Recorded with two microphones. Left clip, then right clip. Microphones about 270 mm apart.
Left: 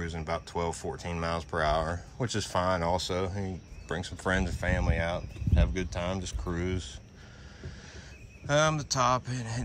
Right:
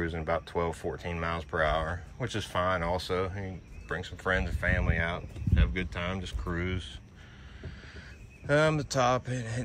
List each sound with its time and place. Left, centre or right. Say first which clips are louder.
0.0 s speech: right 3 dB; centre
8.5 s speech: even; centre